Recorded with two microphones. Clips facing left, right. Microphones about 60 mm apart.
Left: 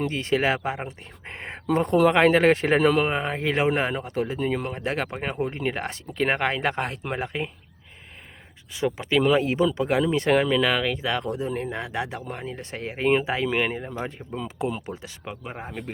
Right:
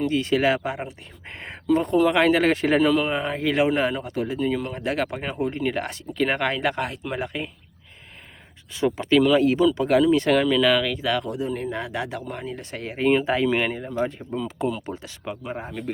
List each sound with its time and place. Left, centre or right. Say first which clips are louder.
0.0 s speech: right 3 dB; left
2.8 s speech: even; left
7.2 s speech: left 1 dB; left
8.7 s speech: right 4 dB; centre
9.2 s speech: right 1 dB; left
13.4 s speech: right 2 dB; centre
13.7 s speech: right 4 dB; centre